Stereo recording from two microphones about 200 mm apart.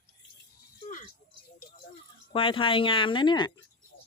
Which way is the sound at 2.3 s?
25° left (ahead or behind).